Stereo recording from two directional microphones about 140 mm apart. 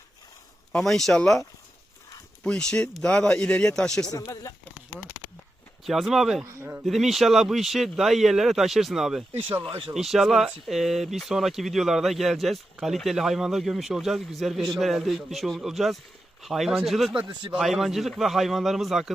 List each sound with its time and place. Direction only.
0.7 s speech: 5° left (ahead or behind)
5.8 s speech: centre (ahead or behind)
6.4 s a man's voice: 20° right (ahead or behind)
6.8 s speech: centre (ahead or behind)
9.3 s speech: 40° right (ahead or behind)
9.9 s speech: centre (ahead or behind)